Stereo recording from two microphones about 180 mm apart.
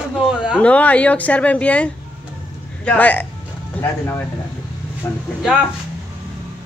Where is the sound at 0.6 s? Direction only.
5° left (ahead or behind).